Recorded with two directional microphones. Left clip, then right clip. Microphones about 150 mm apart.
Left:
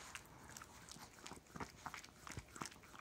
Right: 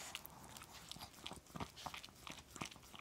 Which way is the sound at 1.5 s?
30° right (ahead or behind).